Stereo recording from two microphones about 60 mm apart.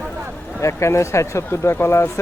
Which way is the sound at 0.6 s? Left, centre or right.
Left.